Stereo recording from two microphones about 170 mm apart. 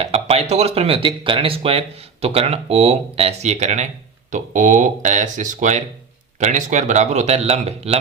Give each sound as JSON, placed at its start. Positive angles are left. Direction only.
{"t": 0.0, "sound": "a man's voice", "side_deg": -35}